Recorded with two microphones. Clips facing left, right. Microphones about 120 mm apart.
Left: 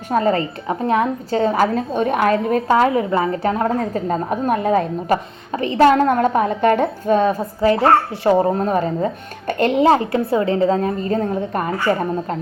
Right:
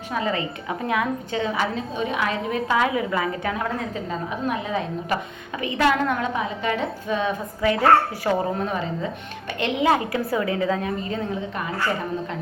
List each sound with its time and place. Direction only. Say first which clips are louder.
0.1 s a woman's voice: left 8 dB; 45° left (ahead or behind)